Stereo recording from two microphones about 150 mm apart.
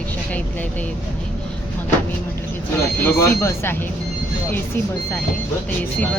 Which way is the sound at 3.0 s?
15° left (ahead or behind).